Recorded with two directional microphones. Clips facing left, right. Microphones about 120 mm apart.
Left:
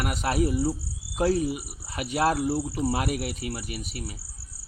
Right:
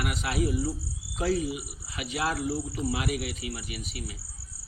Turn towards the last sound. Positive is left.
turn(degrees=40)  # may be behind; listen again after turning